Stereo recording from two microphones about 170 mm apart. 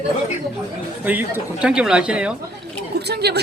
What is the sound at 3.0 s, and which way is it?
Speech, 75° right (ahead or behind).